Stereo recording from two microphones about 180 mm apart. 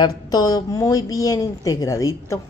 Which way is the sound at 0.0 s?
20° left (ahead or behind).